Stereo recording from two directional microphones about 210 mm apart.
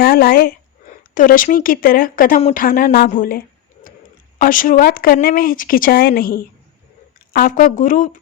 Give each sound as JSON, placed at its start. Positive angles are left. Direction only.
{"t": 0.0, "sound": "speech", "side_deg": 45}